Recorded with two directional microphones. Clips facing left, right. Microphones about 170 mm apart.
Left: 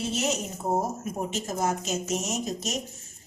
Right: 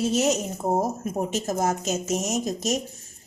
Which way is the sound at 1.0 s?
45° right (ahead or behind).